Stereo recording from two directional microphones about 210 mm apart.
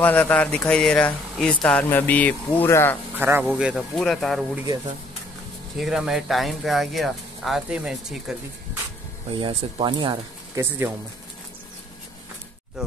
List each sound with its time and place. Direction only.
0.0 s speech: 5° left (ahead or behind)
3.2 s speech: 10° right (ahead or behind)
5.8 s speech: centre (ahead or behind)
9.3 s speech: 25° right (ahead or behind)
10.6 s speech: 10° right (ahead or behind)